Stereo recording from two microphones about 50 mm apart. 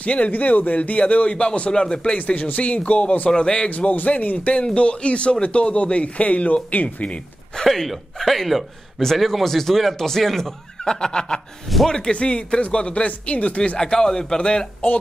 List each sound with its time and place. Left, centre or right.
0.0 s a man's voice: left
2.1 s a man's voice: left
3.7 s a man's voice: left
7.5 s a man's voice: centre; by 13.7 s left
13.7 s speech: centre